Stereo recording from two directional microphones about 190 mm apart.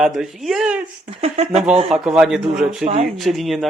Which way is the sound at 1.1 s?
30° right (ahead or behind).